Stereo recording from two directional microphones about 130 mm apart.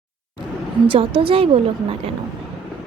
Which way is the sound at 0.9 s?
45° right (ahead or behind).